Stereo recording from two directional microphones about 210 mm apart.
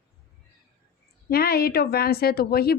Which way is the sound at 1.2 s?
45° left (ahead or behind).